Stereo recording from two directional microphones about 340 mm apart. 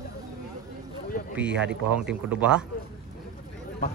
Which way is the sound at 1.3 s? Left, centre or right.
Centre.